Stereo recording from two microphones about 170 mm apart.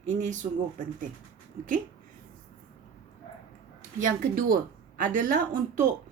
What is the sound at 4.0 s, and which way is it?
A woman's voice, 60° right (ahead or behind).